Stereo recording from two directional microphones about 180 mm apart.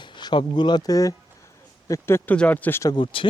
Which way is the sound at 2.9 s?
25° left (ahead or behind).